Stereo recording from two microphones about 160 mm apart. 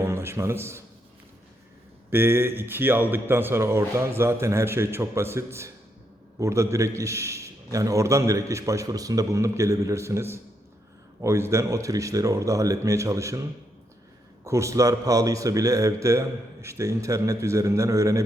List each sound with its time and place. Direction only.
0.0 s a man's voice: 15° right (ahead or behind)
2.0 s a man's voice: 15° right (ahead or behind)
14.4 s a man's voice: 20° right (ahead or behind)